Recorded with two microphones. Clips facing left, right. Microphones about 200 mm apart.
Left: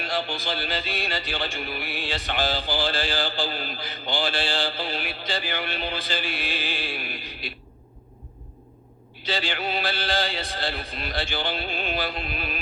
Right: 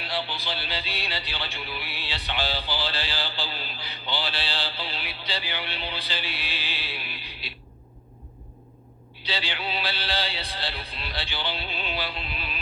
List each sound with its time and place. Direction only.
0.0 s music: 45° left (ahead or behind)
9.2 s music: 45° left (ahead or behind)